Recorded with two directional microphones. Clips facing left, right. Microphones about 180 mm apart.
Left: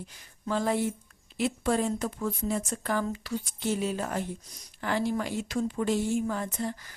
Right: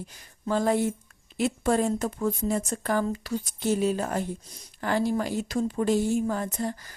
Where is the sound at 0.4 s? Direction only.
45° right (ahead or behind).